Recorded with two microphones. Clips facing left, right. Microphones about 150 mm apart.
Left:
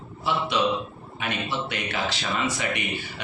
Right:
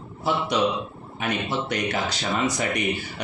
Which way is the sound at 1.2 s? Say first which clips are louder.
Right 3 dB; 40° right (ahead or behind).